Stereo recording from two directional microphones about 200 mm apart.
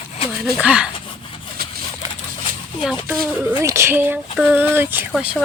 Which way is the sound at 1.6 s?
50° right (ahead or behind).